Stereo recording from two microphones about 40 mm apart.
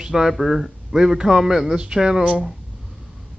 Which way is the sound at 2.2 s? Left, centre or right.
Right.